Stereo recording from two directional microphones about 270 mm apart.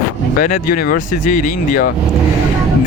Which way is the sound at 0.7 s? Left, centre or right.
Left.